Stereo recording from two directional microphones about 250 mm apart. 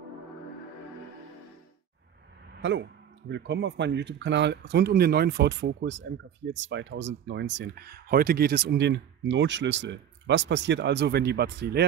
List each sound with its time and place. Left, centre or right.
2.5 s speech: right